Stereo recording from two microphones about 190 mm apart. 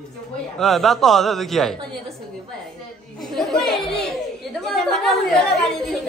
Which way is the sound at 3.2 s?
Centre (ahead or behind).